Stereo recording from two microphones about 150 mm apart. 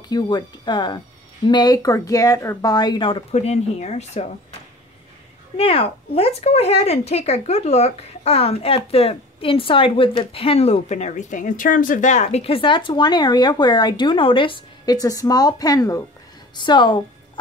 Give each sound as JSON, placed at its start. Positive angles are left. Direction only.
{"t": 0.1, "sound": "speech", "side_deg": 25}
{"t": 5.6, "sound": "speech", "side_deg": 40}